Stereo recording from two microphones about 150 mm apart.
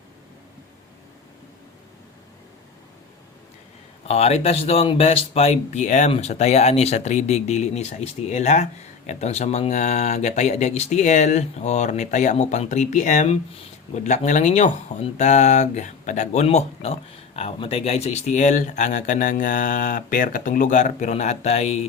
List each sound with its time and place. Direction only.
4.0 s speech: 45° left (ahead or behind)